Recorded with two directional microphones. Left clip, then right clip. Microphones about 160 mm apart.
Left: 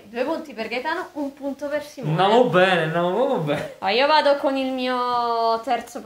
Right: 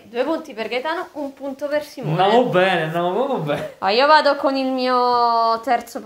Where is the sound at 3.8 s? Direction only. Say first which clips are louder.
Right 4 dB; 30° right (ahead or behind).